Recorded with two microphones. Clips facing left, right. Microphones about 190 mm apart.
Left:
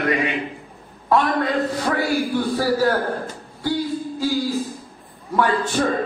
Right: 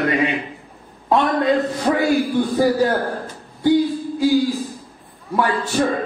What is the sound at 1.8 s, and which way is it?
A man's voice, 20° right (ahead or behind).